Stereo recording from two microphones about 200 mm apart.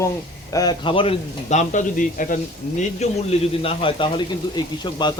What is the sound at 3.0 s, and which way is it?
A man's voice, 30° left (ahead or behind).